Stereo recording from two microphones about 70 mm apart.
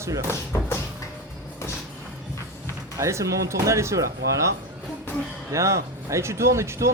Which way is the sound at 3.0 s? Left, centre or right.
Right.